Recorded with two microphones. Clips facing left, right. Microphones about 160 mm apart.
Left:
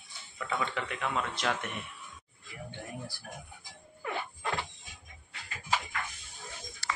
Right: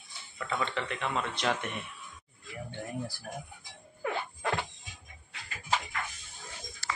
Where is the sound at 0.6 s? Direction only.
5° left (ahead or behind).